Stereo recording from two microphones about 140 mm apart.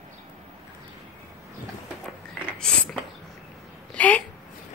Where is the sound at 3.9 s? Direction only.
10° left (ahead or behind).